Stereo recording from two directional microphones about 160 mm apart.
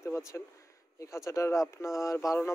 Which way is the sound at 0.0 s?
20° left (ahead or behind).